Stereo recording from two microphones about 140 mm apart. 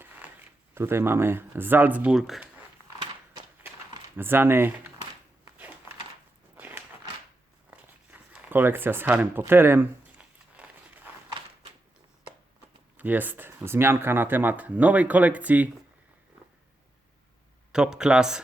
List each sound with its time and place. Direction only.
0.0 s speech: 15° right (ahead or behind)
4.2 s speech: 15° right (ahead or behind)
6.6 s biting: 10° right (ahead or behind)
7.7 s tearing: 10° right (ahead or behind)
9.4 s a sound: 15° right (ahead or behind)
13.0 s speech: 10° right (ahead or behind)
17.7 s speech: 5° right (ahead or behind)